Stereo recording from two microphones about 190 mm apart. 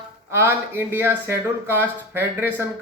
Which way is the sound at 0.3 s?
10° right (ahead or behind).